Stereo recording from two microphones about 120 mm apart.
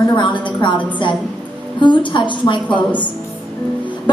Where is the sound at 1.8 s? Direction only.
40° left (ahead or behind).